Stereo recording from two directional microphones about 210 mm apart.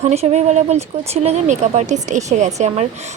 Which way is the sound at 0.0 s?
30° right (ahead or behind).